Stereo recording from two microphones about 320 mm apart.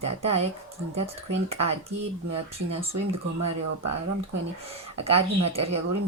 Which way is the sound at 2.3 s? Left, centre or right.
Centre.